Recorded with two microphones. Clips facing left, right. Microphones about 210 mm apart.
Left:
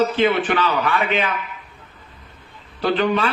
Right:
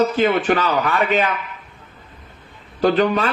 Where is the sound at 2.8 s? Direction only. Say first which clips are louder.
Right 3 dB; 40° right (ahead or behind).